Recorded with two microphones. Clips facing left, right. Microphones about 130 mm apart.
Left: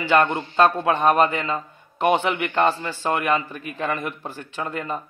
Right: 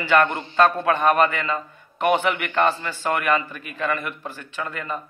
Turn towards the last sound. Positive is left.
turn(degrees=30)  # may be behind; listen again after turning